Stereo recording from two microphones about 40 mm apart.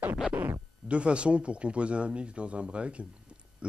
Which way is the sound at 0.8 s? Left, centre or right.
Right.